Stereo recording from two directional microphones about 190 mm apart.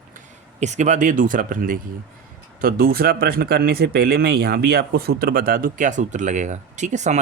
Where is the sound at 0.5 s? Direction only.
35° right (ahead or behind).